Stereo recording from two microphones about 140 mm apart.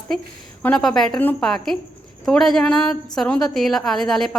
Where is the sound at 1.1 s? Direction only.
15° left (ahead or behind).